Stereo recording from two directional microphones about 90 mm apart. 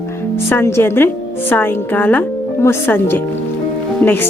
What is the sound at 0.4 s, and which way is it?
Speech, 25° left (ahead or behind).